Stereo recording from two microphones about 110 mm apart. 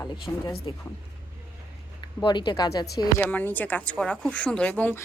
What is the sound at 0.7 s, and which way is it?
Speech, 50° left (ahead or behind).